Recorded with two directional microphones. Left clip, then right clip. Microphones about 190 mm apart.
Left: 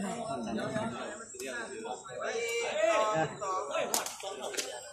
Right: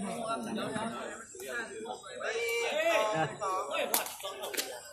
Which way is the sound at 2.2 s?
15° left (ahead or behind).